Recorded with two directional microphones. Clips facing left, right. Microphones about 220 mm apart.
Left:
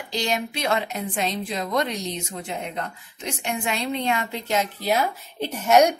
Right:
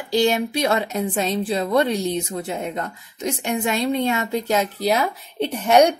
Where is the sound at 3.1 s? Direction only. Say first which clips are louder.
Right 6 dB; 40° right (ahead or behind).